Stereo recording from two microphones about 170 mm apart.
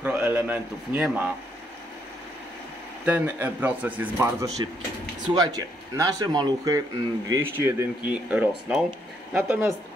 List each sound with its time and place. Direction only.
0.0 s speech: 10° right (ahead or behind)
3.1 s speech: 10° right (ahead or behind)